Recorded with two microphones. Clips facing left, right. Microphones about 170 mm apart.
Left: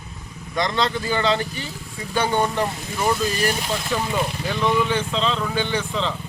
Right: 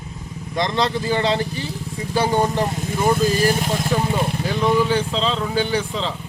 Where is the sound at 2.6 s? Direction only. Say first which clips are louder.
Right 3 dB; 25° right (ahead or behind).